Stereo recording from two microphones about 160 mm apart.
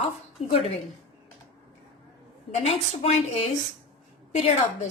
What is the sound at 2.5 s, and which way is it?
A woman's voice, 40° left (ahead or behind).